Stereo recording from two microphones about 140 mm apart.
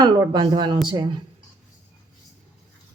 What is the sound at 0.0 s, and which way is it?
Speech, 30° right (ahead or behind).